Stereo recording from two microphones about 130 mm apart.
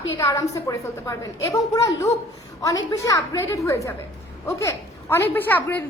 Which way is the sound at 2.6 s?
25° left (ahead or behind).